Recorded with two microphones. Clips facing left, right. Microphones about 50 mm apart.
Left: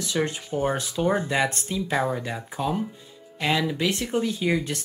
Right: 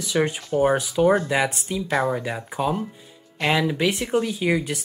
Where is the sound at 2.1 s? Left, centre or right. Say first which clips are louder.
Right 3 dB; centre.